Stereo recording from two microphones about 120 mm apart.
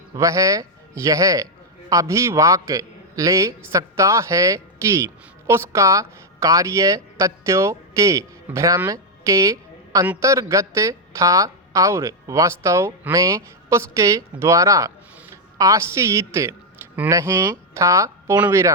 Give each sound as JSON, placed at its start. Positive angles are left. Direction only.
{"t": 0.1, "sound": "speech", "side_deg": -25}
{"t": 8.9, "sound": "a sound", "side_deg": -25}
{"t": 10.2, "sound": "a woman's voice", "side_deg": -25}